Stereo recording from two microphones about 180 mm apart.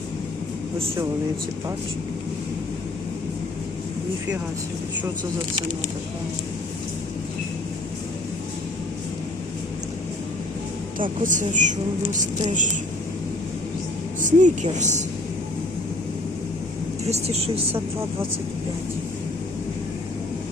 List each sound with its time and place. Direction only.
11.2 s speech: 45° right (ahead or behind)
14.2 s speech: 45° right (ahead or behind)
17.1 s speech: 35° right (ahead or behind)